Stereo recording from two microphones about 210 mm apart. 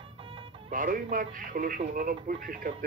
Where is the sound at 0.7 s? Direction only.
40° right (ahead or behind).